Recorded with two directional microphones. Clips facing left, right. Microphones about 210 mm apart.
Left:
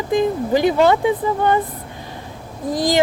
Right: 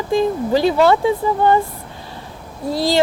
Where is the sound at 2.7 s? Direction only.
15° left (ahead or behind).